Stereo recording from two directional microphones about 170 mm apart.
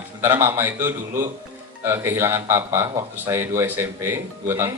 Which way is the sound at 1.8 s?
15° right (ahead or behind).